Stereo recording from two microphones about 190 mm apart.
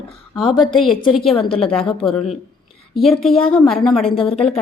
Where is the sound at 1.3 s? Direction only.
30° left (ahead or behind).